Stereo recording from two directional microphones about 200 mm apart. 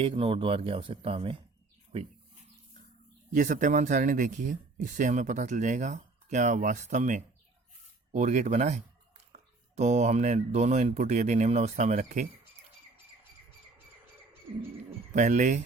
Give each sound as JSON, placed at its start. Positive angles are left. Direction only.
{"t": 0.0, "sound": "speech", "side_deg": -30}
{"t": 3.3, "sound": "speech", "side_deg": -40}
{"t": 15.1, "sound": "speech", "side_deg": -40}